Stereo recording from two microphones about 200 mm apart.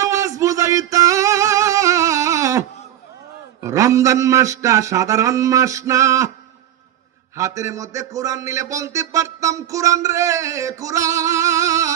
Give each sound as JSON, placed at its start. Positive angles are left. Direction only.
{"t": 0.0, "sound": "singing", "side_deg": -15}
{"t": 3.6, "sound": "a man's voice", "side_deg": -15}
{"t": 7.3, "sound": "a man's voice", "side_deg": -15}